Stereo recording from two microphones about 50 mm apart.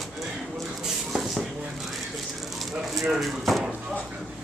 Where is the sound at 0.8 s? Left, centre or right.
Centre.